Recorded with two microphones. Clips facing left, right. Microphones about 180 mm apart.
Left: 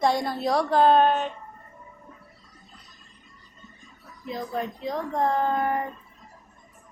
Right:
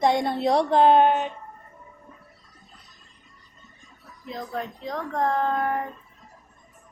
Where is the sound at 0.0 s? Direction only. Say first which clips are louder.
Right 2 dB; 25° right (ahead or behind).